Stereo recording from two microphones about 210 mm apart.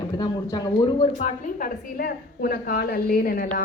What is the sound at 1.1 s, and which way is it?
A woman's voice, 40° left (ahead or behind).